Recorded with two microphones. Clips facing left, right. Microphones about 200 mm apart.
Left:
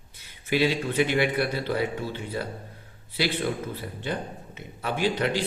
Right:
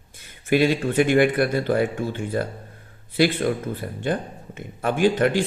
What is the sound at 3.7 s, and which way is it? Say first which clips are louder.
A man's voice: right 6 dB; 50° right (ahead or behind).